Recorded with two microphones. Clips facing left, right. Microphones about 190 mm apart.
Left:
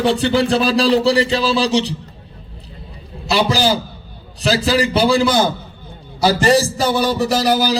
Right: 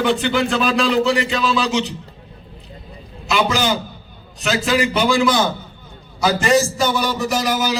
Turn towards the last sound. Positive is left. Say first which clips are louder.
# left 4 dB
turn(degrees=35)  # may be behind; listen again after turning